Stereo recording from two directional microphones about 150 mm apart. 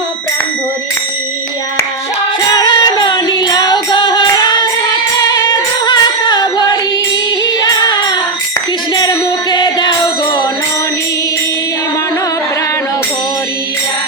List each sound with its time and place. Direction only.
2.6 s music: 25° left (ahead or behind)
9.0 s music: 30° left (ahead or behind)